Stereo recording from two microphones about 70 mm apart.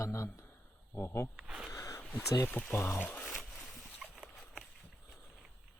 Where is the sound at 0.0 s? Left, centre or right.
Left.